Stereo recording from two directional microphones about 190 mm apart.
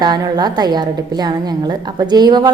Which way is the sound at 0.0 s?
20° right (ahead or behind).